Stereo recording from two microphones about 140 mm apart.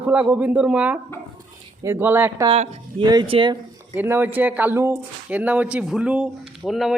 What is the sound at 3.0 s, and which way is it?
Speech, 30° right (ahead or behind).